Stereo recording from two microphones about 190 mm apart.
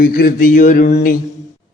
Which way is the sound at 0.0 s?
50° left (ahead or behind).